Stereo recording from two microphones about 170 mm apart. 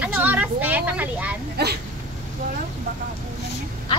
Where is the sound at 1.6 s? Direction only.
70° right (ahead or behind).